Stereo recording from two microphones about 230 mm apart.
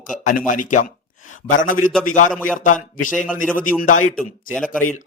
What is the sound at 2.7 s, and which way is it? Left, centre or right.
A man's voice, left.